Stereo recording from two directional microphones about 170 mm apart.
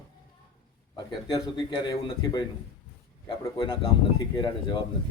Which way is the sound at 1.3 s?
25° left (ahead or behind).